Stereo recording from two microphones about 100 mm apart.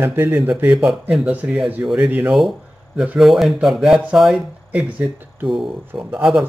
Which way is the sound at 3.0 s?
5° right (ahead or behind).